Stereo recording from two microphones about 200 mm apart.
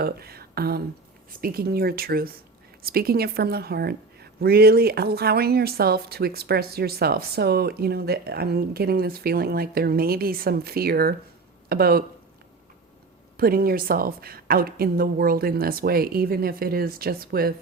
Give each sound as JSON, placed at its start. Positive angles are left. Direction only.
{"t": 0.0, "sound": "a woman's voice", "side_deg": -50}
{"t": 13.3, "sound": "a woman's voice", "side_deg": -50}